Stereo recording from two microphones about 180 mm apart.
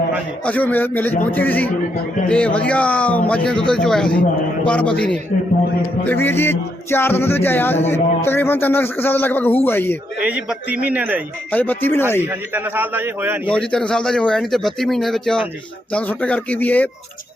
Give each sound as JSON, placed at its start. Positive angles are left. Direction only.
{"t": 0.4, "sound": "a man's voice", "side_deg": 10}
{"t": 10.2, "sound": "a man's voice", "side_deg": -5}
{"t": 11.5, "sound": "speech", "side_deg": 10}
{"t": 12.2, "sound": "a man's voice", "side_deg": -10}
{"t": 13.5, "sound": "a man's voice", "side_deg": 5}